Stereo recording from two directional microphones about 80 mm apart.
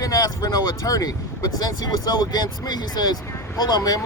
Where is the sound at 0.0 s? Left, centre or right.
Left.